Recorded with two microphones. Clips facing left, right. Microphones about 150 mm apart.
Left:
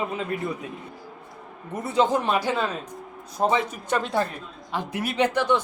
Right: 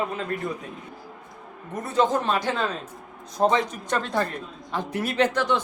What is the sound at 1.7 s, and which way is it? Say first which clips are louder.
Speech: left 1 dB; 10° left (ahead or behind).